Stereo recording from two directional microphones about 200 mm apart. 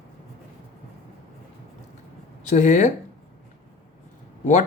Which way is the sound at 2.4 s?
35° left (ahead or behind).